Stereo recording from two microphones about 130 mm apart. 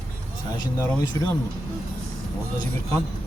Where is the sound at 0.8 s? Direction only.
30° left (ahead or behind).